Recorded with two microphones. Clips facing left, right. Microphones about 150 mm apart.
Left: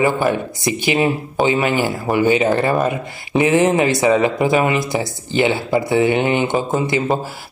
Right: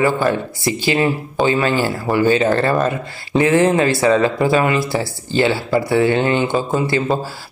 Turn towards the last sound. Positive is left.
turn(degrees=20)  # may be behind; listen again after turning